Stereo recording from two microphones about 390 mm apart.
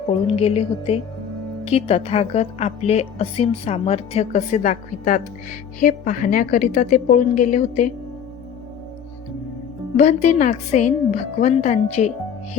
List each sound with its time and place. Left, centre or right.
0.3 s a woman's voice: centre
10.0 s a woman's voice: centre